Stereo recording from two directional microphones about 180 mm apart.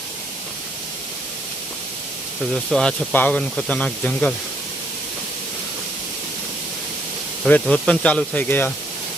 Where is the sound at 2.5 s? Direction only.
Centre (ahead or behind).